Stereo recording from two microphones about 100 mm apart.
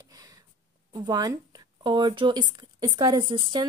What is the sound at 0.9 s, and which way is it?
Speech, 40° right (ahead or behind).